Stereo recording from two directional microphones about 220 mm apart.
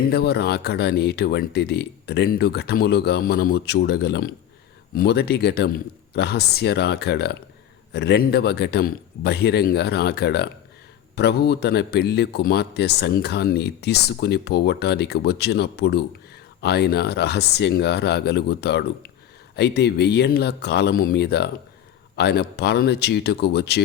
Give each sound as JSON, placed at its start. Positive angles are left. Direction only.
{"t": 0.0, "sound": "a man's voice", "side_deg": 45}